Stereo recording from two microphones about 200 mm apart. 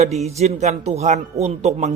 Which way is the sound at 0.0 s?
35° right (ahead or behind).